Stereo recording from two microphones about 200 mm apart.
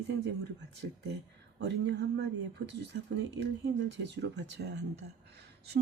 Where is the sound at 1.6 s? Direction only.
60° right (ahead or behind).